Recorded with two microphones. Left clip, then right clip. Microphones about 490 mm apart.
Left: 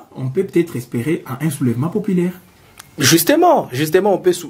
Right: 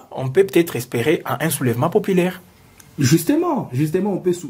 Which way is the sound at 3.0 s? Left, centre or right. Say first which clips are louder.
Left 7 dB; left.